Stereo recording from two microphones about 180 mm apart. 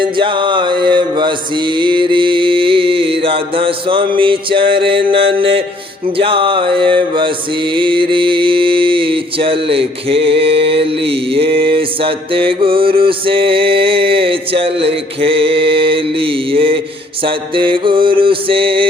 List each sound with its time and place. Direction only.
0.0 s mantra: 25° right (ahead or behind)